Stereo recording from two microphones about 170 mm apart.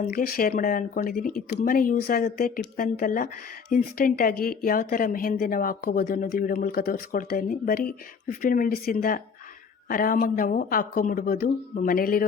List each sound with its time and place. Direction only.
0.0 s speech: 55° left (ahead or behind)